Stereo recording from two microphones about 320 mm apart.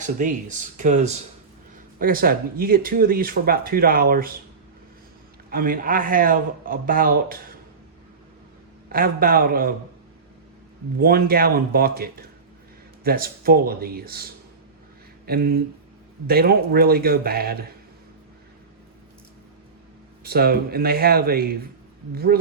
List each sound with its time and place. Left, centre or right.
0.0 s speech: right
5.5 s speech: right
8.9 s speech: right
11.0 s speech: right
15.3 s speech: right
20.2 s speech: right